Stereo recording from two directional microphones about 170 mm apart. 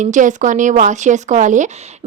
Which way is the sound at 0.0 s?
50° right (ahead or behind).